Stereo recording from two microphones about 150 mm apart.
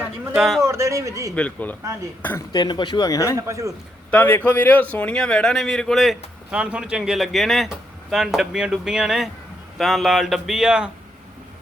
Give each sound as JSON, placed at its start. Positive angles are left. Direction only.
{"t": 0.3, "sound": "a man's voice", "side_deg": 0}
{"t": 0.6, "sound": "speech", "side_deg": -20}
{"t": 1.4, "sound": "speech", "side_deg": 10}
{"t": 2.5, "sound": "speech", "side_deg": 30}
{"t": 3.3, "sound": "speech", "side_deg": -20}
{"t": 4.1, "sound": "a man's voice", "side_deg": 10}